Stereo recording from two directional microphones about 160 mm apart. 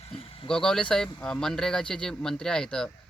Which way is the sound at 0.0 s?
40° left (ahead or behind).